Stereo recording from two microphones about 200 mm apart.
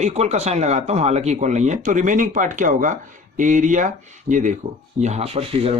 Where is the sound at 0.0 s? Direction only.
35° right (ahead or behind).